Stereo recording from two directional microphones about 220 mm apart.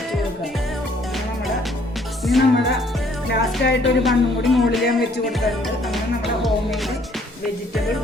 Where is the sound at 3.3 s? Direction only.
50° left (ahead or behind).